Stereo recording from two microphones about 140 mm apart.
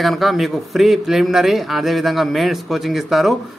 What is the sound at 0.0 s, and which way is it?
A man's voice, centre (ahead or behind).